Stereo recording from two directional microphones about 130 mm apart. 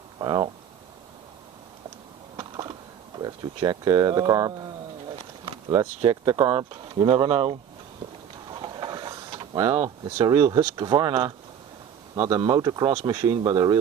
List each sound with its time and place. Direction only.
0.2 s speech: 35° right (ahead or behind)
2.3 s a sound: 30° right (ahead or behind)
6.6 s speech: 35° right (ahead or behind)
8.4 s vehicle: 35° right (ahead or behind)
10.0 s speech: 30° right (ahead or behind)